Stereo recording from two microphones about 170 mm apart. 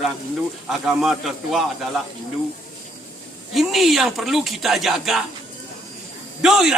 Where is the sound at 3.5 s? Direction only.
Centre (ahead or behind).